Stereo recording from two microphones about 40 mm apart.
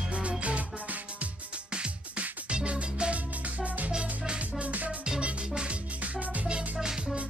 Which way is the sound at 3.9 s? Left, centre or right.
Right.